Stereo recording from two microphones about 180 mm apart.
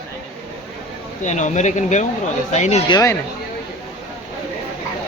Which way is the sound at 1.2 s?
40° left (ahead or behind).